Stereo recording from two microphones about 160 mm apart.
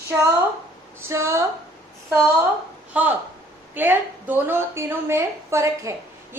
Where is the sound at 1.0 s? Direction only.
15° right (ahead or behind).